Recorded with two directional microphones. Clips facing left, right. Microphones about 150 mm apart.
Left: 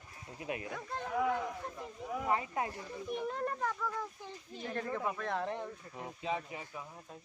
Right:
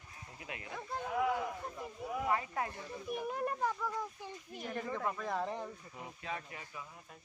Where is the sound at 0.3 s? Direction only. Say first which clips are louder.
Left 8 dB; 25° left (ahead or behind).